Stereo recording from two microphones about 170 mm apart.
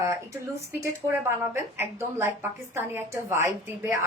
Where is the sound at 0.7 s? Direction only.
15° right (ahead or behind).